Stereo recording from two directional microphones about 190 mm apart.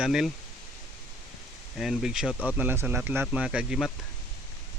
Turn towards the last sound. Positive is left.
turn(degrees=-5)  # may be behind; listen again after turning